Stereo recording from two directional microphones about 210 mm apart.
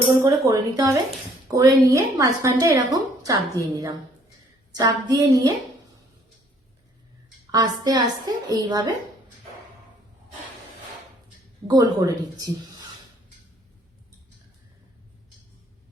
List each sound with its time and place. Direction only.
0.3 s a woman's voice: 15° right (ahead or behind)
7.5 s a woman's voice: 20° right (ahead or behind)
11.7 s a woman's voice: 15° right (ahead or behind)